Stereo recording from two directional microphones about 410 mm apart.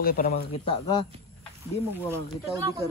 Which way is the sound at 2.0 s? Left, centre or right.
Centre.